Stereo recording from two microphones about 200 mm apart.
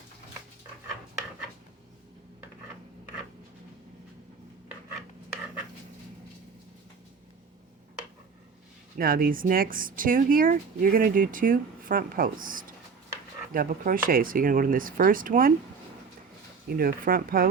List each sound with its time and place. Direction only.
9.0 s speech: 45° right (ahead or behind)
16.6 s speech: 45° right (ahead or behind)